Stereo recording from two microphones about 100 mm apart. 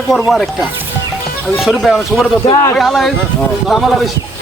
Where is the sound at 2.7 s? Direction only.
Centre (ahead or behind).